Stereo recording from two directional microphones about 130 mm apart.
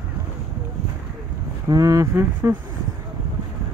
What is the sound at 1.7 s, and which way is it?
Speech, 25° right (ahead or behind).